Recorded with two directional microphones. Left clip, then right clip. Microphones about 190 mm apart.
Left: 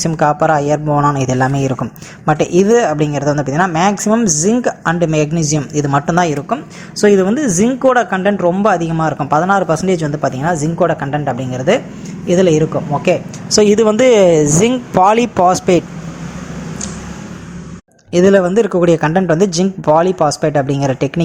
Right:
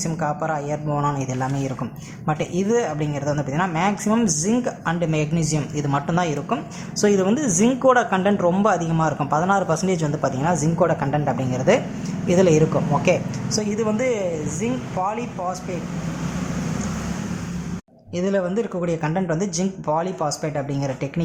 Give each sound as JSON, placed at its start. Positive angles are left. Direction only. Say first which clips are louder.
{"t": 0.0, "sound": "speech", "louder": "left 12 dB", "side_deg": 35}
{"t": 13.5, "sound": "speech", "louder": "left 14 dB", "side_deg": 45}
{"t": 18.1, "sound": "speech", "louder": "left 12 dB", "side_deg": 40}